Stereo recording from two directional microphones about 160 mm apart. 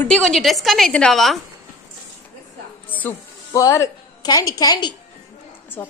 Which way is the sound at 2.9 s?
10° left (ahead or behind).